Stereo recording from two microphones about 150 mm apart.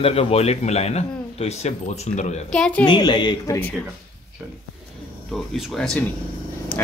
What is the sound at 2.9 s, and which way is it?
Speech, 30° left (ahead or behind).